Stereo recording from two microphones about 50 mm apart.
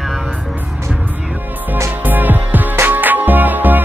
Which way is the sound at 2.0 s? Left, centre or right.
Right.